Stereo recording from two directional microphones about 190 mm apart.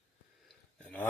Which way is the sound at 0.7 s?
5° left (ahead or behind).